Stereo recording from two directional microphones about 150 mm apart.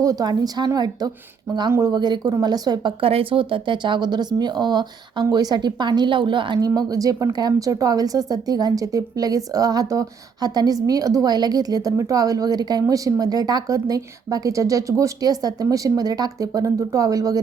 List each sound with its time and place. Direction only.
0.0 s speech: 25° right (ahead or behind)